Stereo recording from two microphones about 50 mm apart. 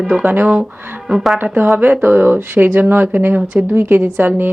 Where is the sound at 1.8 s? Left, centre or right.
Right.